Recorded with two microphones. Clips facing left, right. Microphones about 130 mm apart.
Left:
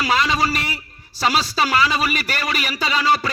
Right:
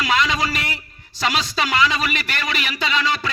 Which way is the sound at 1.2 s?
35° left (ahead or behind).